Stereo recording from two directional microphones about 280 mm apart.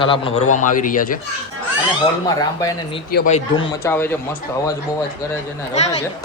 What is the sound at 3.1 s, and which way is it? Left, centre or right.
Speech, left.